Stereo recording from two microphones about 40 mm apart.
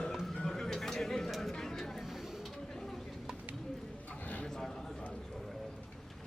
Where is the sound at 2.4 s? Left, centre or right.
Centre.